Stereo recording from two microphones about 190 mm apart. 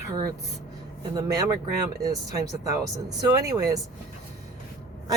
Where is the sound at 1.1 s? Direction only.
20° right (ahead or behind).